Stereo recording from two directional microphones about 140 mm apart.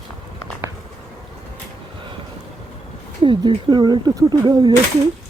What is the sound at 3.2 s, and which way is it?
Speech, 35° right (ahead or behind).